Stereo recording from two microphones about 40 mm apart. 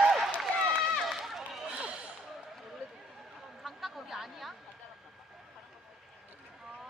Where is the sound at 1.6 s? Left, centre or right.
Right.